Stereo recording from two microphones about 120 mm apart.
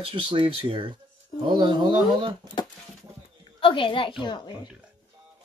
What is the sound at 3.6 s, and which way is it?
Speech, 45° left (ahead or behind).